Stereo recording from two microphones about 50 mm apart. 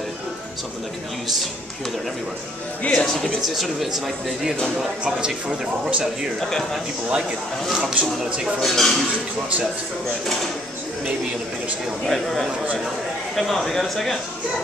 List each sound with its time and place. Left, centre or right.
2.8 s speech: centre
3.3 s speech: centre
5.0 s a man's voice: right
7.1 s a man's voice: right
8.5 s speech: centre
13.4 s speech: centre